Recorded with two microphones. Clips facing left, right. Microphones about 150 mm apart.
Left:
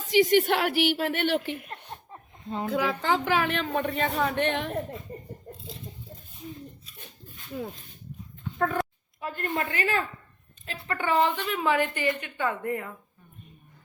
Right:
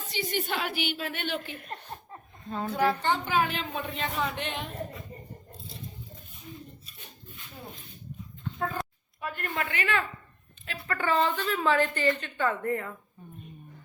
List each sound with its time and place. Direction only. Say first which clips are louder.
0.1 s a woman's voice: left 11 dB; 90° left; by 1.5 s 65° left (ahead or behind)
2.6 s a woman's voice: even; 90° left; by 4.8 s 60° left (ahead or behind)
8.5 s speech: left 6 dB; 60° left (ahead or behind)
9.2 s a woman's voice: left 3 dB; 30° left (ahead or behind)
10.8 s a woman's voice: left 2 dB; 15° left (ahead or behind)